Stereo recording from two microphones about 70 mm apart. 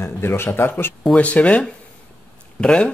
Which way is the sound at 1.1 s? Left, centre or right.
Centre.